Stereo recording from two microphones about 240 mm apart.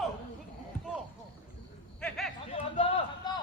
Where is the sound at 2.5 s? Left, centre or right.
Centre.